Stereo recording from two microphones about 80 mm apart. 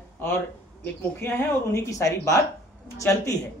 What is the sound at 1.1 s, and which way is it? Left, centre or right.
Speech, left.